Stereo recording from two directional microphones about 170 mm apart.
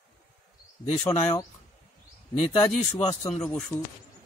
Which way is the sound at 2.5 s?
35° left (ahead or behind).